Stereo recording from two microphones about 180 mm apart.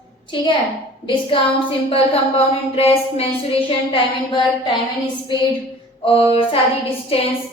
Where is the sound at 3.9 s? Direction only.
25° left (ahead or behind).